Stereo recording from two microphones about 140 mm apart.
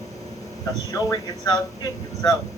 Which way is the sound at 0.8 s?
25° left (ahead or behind).